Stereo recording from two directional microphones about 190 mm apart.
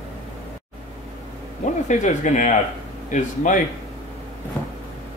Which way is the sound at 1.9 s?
40° left (ahead or behind).